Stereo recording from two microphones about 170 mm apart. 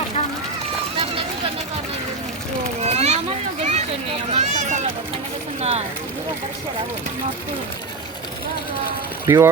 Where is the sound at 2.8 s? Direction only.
40° right (ahead or behind).